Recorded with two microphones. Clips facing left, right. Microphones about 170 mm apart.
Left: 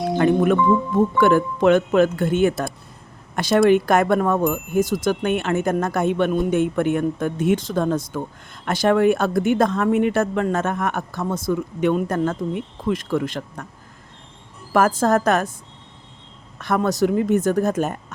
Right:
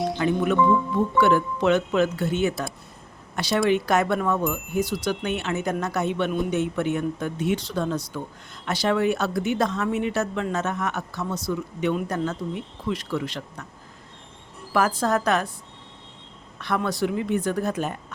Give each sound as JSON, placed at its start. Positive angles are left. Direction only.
{"t": 0.1, "sound": "music", "side_deg": 50}
{"t": 0.9, "sound": "speech", "side_deg": 50}
{"t": 14.7, "sound": "speech", "side_deg": 45}
{"t": 16.6, "sound": "speech", "side_deg": 45}